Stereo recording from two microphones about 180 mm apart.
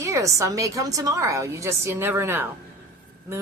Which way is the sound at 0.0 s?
15° right (ahead or behind).